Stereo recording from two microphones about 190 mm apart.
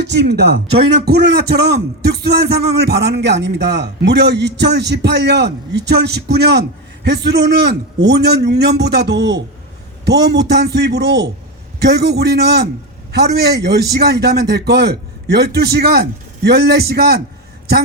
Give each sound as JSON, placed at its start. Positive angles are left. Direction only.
{"t": 0.0, "sound": "a man's voice", "side_deg": -65}